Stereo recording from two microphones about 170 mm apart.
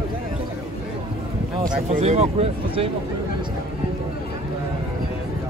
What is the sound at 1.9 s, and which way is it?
Speech, 40° right (ahead or behind).